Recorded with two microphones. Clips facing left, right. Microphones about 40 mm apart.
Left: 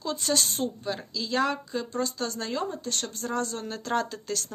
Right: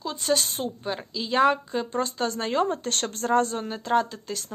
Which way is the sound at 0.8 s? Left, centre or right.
Right.